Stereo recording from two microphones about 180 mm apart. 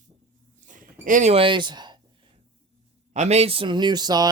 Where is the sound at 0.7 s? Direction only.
45° right (ahead or behind); by 2.0 s 25° right (ahead or behind).